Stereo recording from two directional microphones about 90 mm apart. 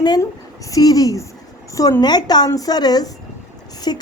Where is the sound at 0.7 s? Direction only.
40° left (ahead or behind).